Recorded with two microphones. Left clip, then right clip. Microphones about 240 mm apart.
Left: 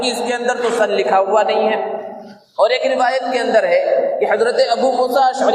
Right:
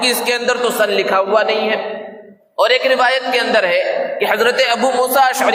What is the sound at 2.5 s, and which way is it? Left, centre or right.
A man's voice, right.